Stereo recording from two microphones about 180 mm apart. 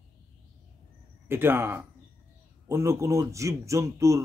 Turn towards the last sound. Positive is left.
turn(degrees=-15)  # may be behind; listen again after turning